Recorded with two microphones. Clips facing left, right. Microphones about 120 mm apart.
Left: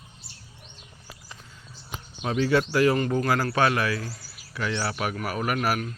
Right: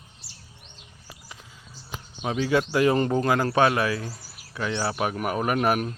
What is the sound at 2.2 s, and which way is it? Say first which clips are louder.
A man's voice: left 1 dB; 10° right (ahead or behind).